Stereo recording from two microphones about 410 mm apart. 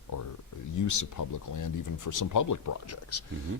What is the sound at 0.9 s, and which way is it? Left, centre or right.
Speech, left.